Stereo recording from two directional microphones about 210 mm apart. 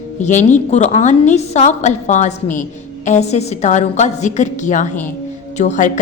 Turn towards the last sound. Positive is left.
turn(degrees=35)  # may be behind; listen again after turning